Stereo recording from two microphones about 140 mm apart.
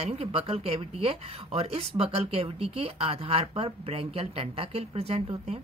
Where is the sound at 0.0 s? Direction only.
45° right (ahead or behind).